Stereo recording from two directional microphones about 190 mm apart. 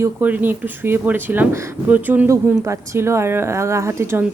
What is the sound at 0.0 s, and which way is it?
Speech, 10° right (ahead or behind).